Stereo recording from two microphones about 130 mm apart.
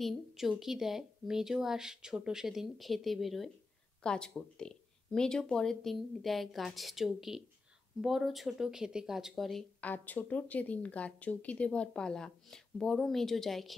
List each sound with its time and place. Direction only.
0.0 s speech: centre (ahead or behind)